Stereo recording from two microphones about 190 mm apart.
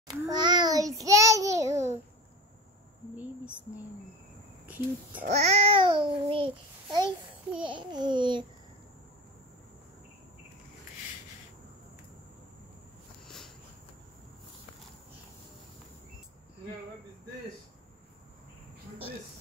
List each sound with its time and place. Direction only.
0.1 s child singing: 20° right (ahead or behind)
4.6 s speech: 10° right (ahead or behind)
5.2 s a child's voice: 35° right (ahead or behind)